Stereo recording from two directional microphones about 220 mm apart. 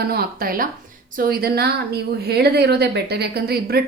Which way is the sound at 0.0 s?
45° right (ahead or behind).